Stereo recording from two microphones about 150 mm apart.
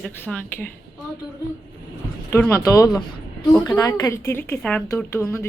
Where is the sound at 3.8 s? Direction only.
20° left (ahead or behind).